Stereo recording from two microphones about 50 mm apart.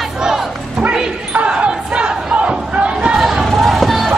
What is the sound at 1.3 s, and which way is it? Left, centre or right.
Crowd, right.